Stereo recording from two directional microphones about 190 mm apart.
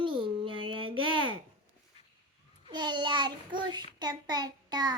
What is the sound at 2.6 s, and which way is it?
Child singing, 25° right (ahead or behind).